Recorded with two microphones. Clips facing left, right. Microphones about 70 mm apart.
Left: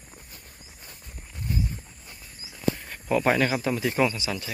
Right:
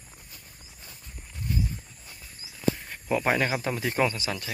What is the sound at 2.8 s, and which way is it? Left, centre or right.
Cricket, centre.